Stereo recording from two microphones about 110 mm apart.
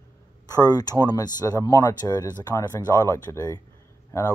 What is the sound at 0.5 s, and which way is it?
Speech, 35° left (ahead or behind).